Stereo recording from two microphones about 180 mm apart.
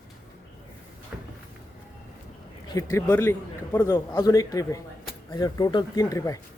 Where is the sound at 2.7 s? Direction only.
15° left (ahead or behind).